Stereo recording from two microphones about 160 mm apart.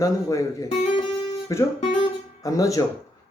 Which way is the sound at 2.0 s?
20° left (ahead or behind).